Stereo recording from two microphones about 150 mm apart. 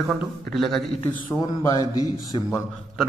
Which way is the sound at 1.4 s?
25° left (ahead or behind).